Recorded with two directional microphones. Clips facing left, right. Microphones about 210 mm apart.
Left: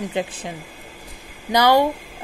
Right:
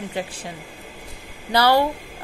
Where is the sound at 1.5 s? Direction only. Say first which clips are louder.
Left 2 dB; 15° left (ahead or behind).